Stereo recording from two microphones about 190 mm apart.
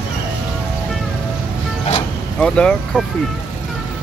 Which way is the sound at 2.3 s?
5° left (ahead or behind).